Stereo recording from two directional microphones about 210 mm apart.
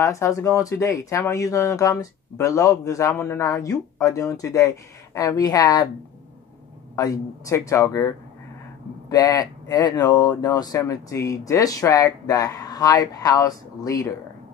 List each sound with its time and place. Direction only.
0.0 s speech: 15° left (ahead or behind)
7.0 s speech: 15° left (ahead or behind)
9.1 s speech: 15° left (ahead or behind)